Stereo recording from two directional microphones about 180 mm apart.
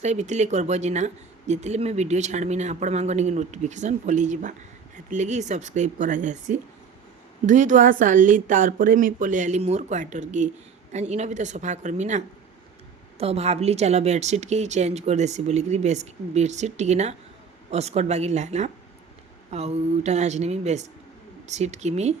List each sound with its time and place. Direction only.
0.0 s speech: 40° right (ahead or behind)